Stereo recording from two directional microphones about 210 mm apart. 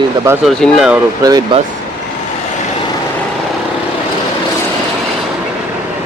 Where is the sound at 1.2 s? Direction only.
20° right (ahead or behind).